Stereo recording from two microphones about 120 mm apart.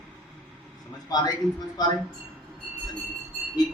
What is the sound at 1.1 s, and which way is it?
Speech, 30° left (ahead or behind).